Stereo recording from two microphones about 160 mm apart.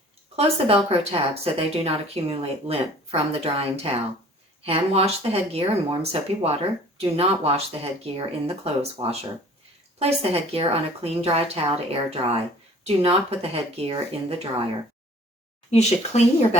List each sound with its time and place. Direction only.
0.3 s speech: 40° right (ahead or behind)
15.7 s speech: 45° left (ahead or behind)